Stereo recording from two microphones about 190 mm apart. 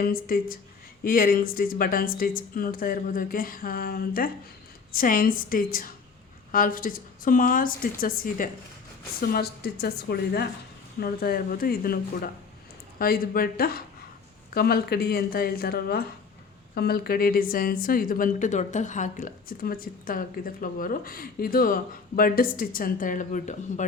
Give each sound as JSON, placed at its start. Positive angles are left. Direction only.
{"t": 0.0, "sound": "a woman's voice", "side_deg": 50}